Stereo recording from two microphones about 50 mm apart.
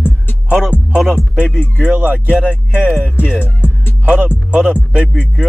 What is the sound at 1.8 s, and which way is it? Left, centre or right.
Speech, right.